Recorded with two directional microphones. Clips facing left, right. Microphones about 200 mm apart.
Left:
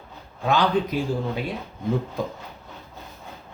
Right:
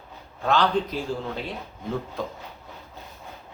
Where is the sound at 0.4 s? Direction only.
15° left (ahead or behind).